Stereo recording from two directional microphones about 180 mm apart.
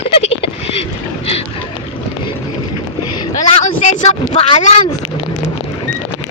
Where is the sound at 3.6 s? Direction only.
45° left (ahead or behind).